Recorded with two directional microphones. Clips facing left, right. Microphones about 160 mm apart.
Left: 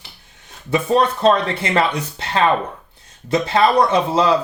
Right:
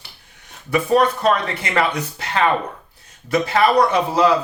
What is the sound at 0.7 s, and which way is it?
Speech, 25° left (ahead or behind).